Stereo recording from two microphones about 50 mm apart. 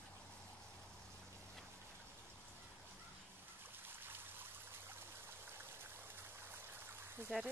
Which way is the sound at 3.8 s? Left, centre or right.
Right.